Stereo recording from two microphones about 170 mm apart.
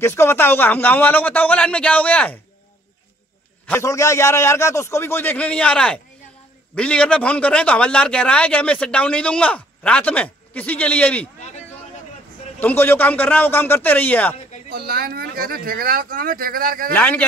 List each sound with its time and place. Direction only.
0.0 s a man's voice: 15° left (ahead or behind)
3.6 s a man's voice: 15° left (ahead or behind)
11.3 s a sound: 40° left (ahead or behind)
12.5 s a man's voice: 10° left (ahead or behind)
14.7 s speech: 65° right (ahead or behind)
16.9 s a man's voice: 10° left (ahead or behind)